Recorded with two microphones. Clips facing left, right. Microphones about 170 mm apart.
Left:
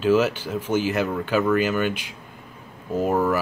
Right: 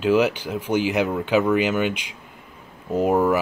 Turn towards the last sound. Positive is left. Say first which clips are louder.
# right 3 dB
turn(degrees=-15)  # may be behind; listen again after turning